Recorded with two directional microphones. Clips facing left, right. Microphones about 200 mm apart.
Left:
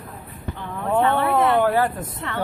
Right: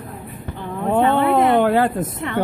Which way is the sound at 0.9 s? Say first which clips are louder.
Right 3 dB; 20° right (ahead or behind).